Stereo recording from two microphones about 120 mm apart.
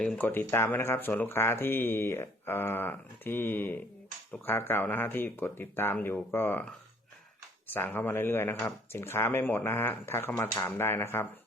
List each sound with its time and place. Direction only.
0.0 s speech: 10° left (ahead or behind)
0.3 s speech: 20° left (ahead or behind)